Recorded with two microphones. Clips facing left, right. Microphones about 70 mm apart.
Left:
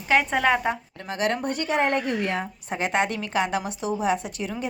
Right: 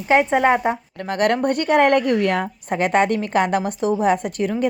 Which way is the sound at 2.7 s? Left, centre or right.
Right.